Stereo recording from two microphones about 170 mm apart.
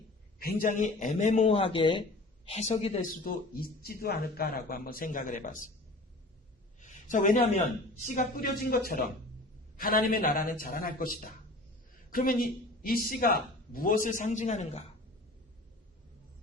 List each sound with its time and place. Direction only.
0.3 s a man's voice: 60° left (ahead or behind); by 2.0 s 30° left (ahead or behind)
2.5 s a man's voice: 40° left (ahead or behind)
3.6 s a man's voice: 60° left (ahead or behind)
6.7 s a sound: 50° left (ahead or behind)
8.0 s a man's voice: 50° left (ahead or behind)